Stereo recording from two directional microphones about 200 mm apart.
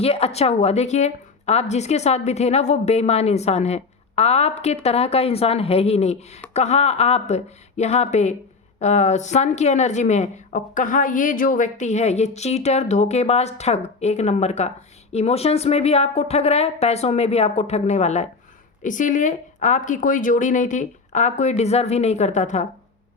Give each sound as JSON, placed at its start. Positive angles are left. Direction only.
{"t": 0.0, "sound": "a woman's voice", "side_deg": 30}